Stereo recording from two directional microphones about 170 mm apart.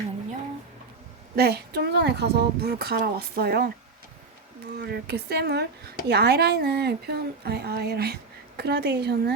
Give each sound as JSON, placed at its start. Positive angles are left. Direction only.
{"t": 1.4, "sound": "a woman's voice", "side_deg": -70}
{"t": 4.8, "sound": "a woman's voice", "side_deg": -75}